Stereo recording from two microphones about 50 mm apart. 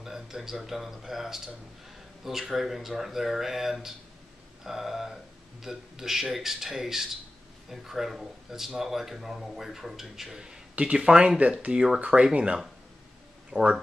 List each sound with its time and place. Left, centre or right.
0.0 s speech: centre